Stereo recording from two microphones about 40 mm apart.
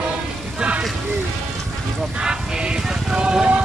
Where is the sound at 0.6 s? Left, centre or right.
Right.